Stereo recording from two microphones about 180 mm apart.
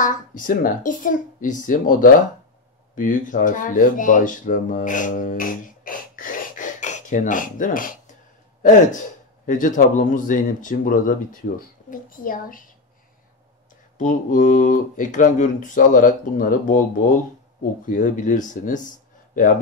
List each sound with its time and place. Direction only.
0.0 s speech: 45° left (ahead or behind)
9.5 s speech: 45° left (ahead or behind)
13.9 s speech: 45° left (ahead or behind)
17.8 s speech: 45° left (ahead or behind)